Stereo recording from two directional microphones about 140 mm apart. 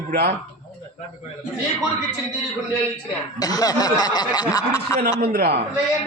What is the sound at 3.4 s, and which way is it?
Speech, 25° left (ahead or behind).